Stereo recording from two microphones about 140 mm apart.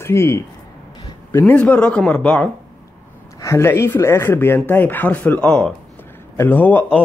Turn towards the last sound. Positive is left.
turn(degrees=15)  # may be behind; listen again after turning